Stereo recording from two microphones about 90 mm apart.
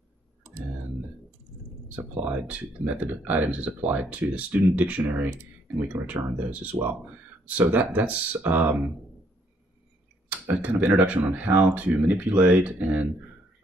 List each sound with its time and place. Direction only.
1.9 s speech: 15° right (ahead or behind)
10.4 s speech: 15° right (ahead or behind)